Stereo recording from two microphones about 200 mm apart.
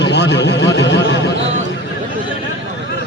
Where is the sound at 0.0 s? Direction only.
60° left (ahead or behind).